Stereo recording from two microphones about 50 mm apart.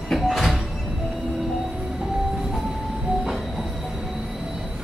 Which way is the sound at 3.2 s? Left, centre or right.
Centre.